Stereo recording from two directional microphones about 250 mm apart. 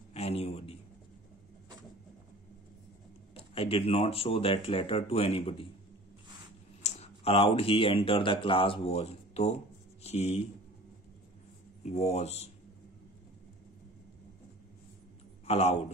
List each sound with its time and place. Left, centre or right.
0.1 s a sound: left
3.3 s speech: left
6.8 s speech: left
11.8 s speech: left
15.4 s speech: left